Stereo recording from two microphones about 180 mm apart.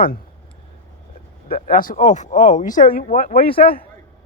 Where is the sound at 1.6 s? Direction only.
50° left (ahead or behind).